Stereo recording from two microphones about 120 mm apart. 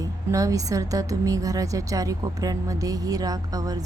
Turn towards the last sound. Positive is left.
turn(degrees=-30)  # may be behind; listen again after turning